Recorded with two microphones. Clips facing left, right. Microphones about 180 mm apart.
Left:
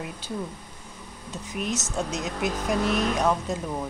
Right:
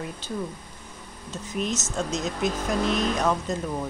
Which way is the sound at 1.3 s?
15° left (ahead or behind).